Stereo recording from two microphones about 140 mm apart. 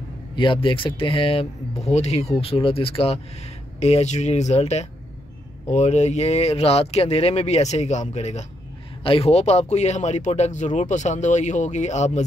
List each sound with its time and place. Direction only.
0.4 s speech: 35° left (ahead or behind); by 12.3 s 55° left (ahead or behind)